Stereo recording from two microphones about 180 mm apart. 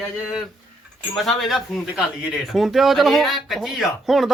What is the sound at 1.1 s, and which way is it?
Speech, centre (ahead or behind).